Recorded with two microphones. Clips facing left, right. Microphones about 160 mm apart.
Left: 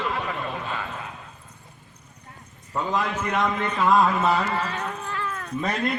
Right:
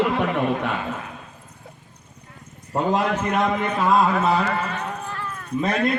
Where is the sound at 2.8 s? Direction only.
55° right (ahead or behind).